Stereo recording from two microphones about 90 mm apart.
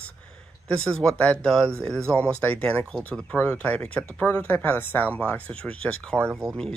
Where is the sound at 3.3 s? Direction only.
20° left (ahead or behind).